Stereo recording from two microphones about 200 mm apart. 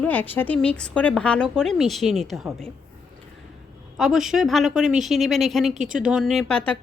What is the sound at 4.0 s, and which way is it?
Speech, centre (ahead or behind).